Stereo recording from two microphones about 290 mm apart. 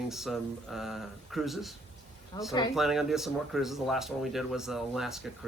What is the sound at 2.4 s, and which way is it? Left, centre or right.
Speech, centre.